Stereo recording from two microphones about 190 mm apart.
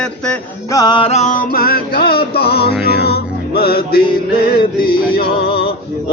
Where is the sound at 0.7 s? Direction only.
20° left (ahead or behind); by 1.5 s 40° left (ahead or behind).